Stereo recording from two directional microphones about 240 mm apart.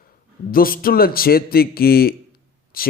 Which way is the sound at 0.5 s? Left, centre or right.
Left.